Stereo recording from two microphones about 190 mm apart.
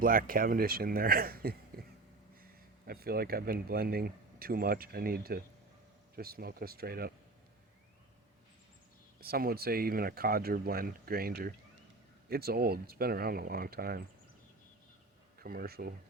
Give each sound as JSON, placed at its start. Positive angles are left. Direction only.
{"t": 0.0, "sound": "speech", "side_deg": -50}
{"t": 9.2, "sound": "speech", "side_deg": -55}
{"t": 15.4, "sound": "speech", "side_deg": -50}